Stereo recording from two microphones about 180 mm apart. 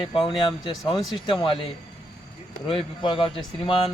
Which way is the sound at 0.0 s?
25° left (ahead or behind).